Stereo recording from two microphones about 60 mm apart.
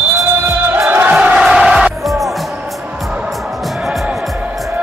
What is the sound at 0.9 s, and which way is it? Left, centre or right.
Crowd, right.